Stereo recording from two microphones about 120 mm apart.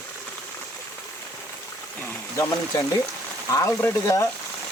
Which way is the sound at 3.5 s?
25° left (ahead or behind).